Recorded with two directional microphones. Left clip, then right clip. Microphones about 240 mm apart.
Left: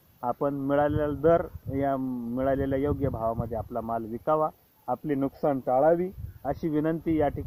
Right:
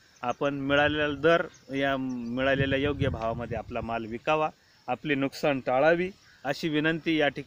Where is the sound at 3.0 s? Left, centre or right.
Centre.